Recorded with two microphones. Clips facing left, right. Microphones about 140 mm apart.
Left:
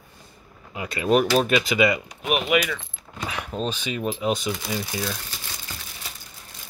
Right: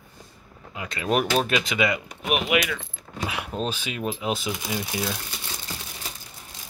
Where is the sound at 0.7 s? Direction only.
5° left (ahead or behind).